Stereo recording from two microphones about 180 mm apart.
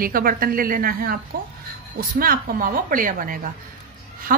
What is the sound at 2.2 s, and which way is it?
A woman's voice, 50° right (ahead or behind).